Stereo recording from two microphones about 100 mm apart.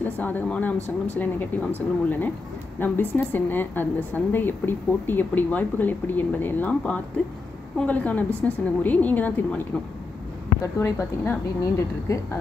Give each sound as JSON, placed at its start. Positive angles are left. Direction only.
{"t": 0.2, "sound": "a woman's voice", "side_deg": 15}
{"t": 10.6, "sound": "a woman's voice", "side_deg": 30}